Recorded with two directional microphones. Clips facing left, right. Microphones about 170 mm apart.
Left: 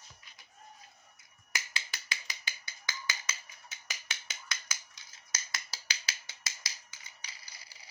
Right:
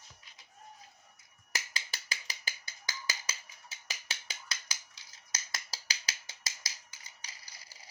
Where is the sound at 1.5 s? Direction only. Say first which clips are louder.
Even; 35° right (ahead or behind).